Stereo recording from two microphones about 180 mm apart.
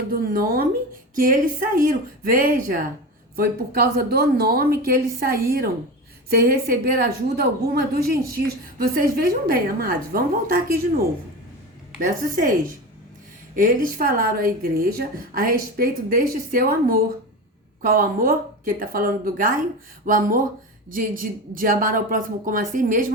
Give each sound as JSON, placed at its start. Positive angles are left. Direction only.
{"t": 0.1, "sound": "a sound", "side_deg": -55}
{"t": 1.1, "sound": "a woman's voice", "side_deg": -50}
{"t": 12.4, "sound": "a woman's voice", "side_deg": -50}